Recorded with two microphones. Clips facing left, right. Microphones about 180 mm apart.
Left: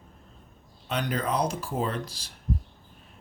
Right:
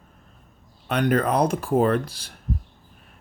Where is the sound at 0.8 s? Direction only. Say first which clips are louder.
Right 8 dB; 60° right (ahead or behind).